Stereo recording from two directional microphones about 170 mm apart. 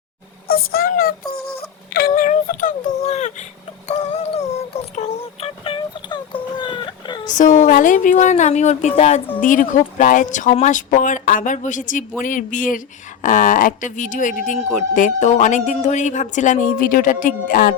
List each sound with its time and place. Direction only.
0.4 s a child's voice: 60° left (ahead or behind); by 3.4 s 45° left (ahead or behind)
3.8 s a sound: 40° left (ahead or behind)
7.3 s speech: 45° left (ahead or behind)